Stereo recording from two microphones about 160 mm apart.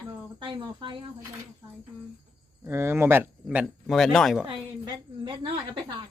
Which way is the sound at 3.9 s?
5° left (ahead or behind).